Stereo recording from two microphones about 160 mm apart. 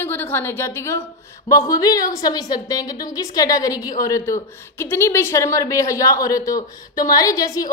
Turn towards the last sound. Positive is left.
turn(degrees=20)  # may be behind; listen again after turning